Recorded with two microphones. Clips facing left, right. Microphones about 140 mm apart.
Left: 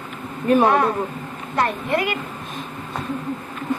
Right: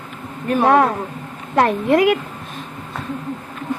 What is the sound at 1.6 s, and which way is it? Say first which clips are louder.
Speech: right 7 dB; 90° right.